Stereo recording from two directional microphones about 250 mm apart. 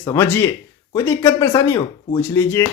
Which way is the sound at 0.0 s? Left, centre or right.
Centre.